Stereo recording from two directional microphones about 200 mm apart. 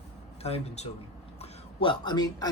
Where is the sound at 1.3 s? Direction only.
25° left (ahead or behind).